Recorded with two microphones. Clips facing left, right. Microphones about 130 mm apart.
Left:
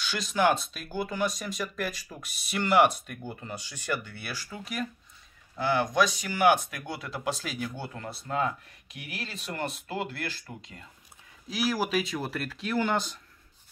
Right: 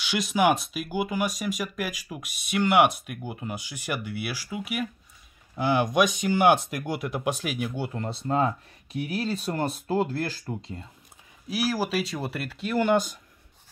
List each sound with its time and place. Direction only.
0.3 s speech: 10° right (ahead or behind)
8.0 s speech: 25° right (ahead or behind)
10.5 s speech: 25° right (ahead or behind)
11.4 s speech: 10° right (ahead or behind)